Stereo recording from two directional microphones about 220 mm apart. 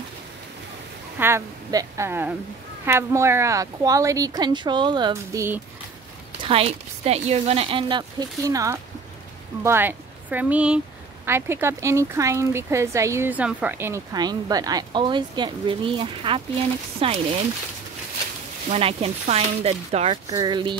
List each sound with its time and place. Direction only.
1.2 s speech: 15° right (ahead or behind)
6.4 s speech: 25° right (ahead or behind)
18.7 s speech: 25° right (ahead or behind)
20.2 s speech: 15° right (ahead or behind)